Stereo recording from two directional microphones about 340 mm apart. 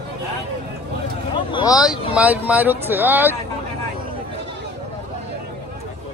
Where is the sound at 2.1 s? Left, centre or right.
Centre.